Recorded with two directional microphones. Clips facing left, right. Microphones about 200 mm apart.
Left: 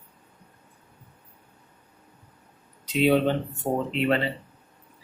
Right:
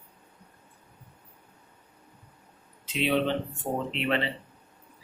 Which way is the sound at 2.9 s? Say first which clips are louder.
Left 5 dB; 40° left (ahead or behind).